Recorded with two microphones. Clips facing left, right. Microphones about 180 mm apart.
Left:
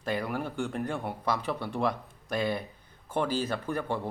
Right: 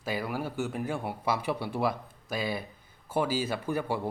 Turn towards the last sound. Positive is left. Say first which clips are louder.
# right 1 dB
turn(degrees=-10)  # may be behind; listen again after turning